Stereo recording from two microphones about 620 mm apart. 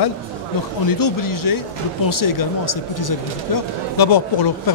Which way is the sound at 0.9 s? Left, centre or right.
Left.